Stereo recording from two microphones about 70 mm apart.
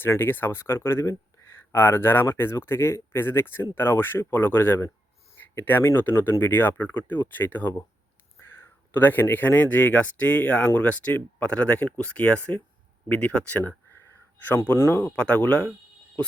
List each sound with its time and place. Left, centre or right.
0.0 s speech: left
1.7 s speech: left
15.1 s speech: centre